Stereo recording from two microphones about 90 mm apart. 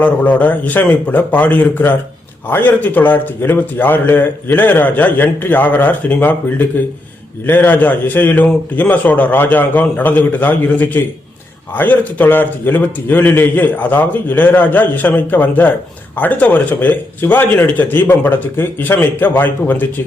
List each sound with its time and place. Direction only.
0.0 s a man's voice: 15° left (ahead or behind)